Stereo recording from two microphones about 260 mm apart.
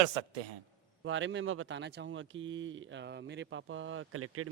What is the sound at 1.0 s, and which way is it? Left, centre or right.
Speech, right.